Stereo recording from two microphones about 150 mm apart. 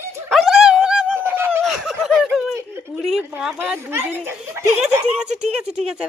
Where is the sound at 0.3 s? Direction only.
Centre (ahead or behind).